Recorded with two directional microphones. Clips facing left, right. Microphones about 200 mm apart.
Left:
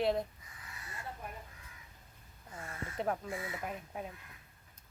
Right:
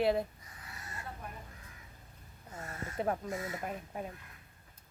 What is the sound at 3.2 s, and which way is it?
Speech, 40° right (ahead or behind).